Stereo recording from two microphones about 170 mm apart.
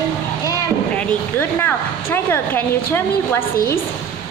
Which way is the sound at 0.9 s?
10° left (ahead or behind).